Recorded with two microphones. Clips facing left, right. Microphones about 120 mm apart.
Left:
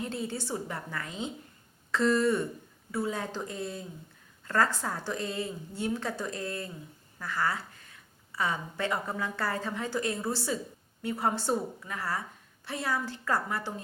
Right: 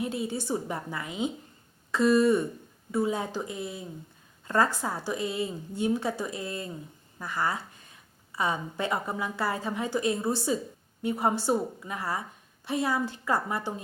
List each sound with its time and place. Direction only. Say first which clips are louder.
0.0 s a woman's voice: right 3 dB; 15° right (ahead or behind)